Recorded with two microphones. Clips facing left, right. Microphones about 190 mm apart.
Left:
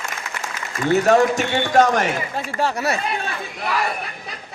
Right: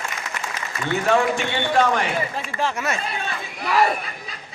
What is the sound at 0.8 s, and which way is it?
A man's voice, 40° left (ahead or behind).